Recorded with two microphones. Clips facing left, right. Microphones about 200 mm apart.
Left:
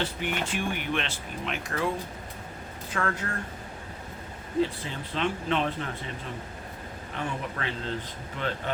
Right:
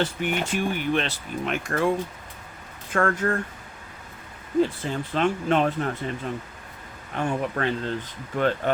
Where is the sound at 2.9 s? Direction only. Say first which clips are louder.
Right 8 dB; 50° right (ahead or behind).